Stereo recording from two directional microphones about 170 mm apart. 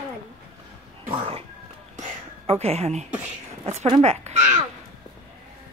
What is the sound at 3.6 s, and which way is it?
Speech, 40° right (ahead or behind).